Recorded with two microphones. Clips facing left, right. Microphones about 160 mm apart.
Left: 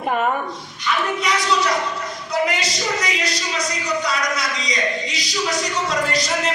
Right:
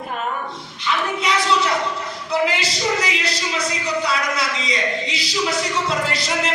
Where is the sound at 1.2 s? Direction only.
25° right (ahead or behind).